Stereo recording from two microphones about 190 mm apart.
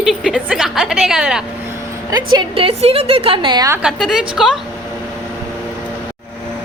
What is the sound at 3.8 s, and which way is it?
Speech, centre (ahead or behind).